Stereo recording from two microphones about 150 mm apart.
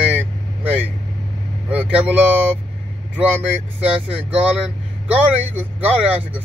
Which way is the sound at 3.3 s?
10° right (ahead or behind).